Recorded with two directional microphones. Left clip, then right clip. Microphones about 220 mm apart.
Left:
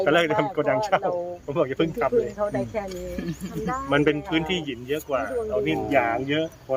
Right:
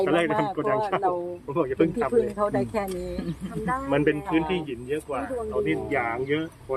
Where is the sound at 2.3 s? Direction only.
50° right (ahead or behind).